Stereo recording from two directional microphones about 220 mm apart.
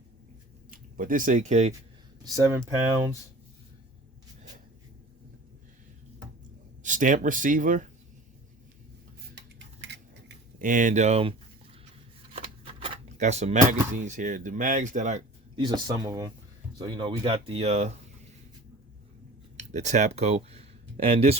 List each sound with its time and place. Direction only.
0.7 s speech: 40° right (ahead or behind)
2.2 s speech: 15° right (ahead or behind)
6.8 s speech: 35° right (ahead or behind)
9.8 s a sound: 50° right (ahead or behind)
10.6 s speech: 35° right (ahead or behind)
12.8 s speech: 30° right (ahead or behind)
15.5 s speech: 20° right (ahead or behind)
19.5 s speech: 30° right (ahead or behind)